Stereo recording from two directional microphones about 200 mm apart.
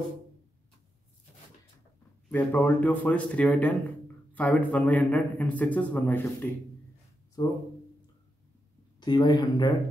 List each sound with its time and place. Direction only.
2.2 s a man's voice: 10° left (ahead or behind)
7.4 s speech: 20° left (ahead or behind)
9.0 s speech: 20° left (ahead or behind)